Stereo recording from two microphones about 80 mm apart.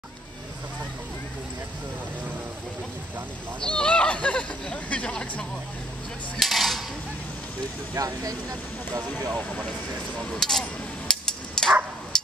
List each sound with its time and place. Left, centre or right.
3.6 s speech: centre
6.3 s speech: centre
7.9 s speech: right
9.4 s speech: left
10.3 s a sound: centre